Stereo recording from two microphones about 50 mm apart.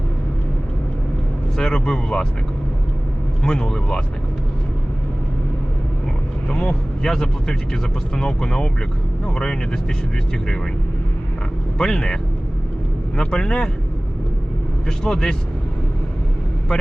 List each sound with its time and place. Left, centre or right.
1.5 s speech: centre
3.4 s speech: centre
6.5 s speech: centre
11.8 s speech: centre
14.8 s speech: centre